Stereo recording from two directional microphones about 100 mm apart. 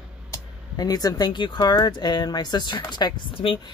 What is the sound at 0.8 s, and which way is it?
Speech, 40° left (ahead or behind).